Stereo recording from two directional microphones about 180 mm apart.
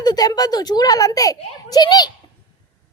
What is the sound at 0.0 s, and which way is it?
A woman's voice, 20° left (ahead or behind).